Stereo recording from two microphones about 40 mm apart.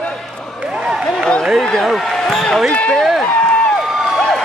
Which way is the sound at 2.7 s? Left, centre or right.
Left.